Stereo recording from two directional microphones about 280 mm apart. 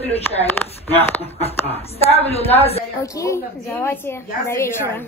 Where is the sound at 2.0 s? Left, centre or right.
Left.